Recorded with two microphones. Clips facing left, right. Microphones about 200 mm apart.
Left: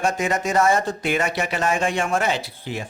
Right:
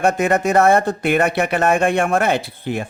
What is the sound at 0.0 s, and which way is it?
Speech, 60° right (ahead or behind).